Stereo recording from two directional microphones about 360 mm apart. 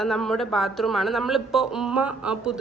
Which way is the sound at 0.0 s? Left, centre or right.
Centre.